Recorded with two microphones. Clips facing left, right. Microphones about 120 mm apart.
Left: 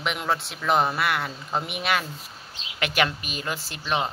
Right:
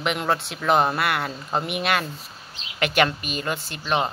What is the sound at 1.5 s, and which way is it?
Speech, centre (ahead or behind).